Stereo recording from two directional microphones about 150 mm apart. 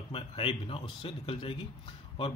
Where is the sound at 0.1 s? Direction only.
35° left (ahead or behind).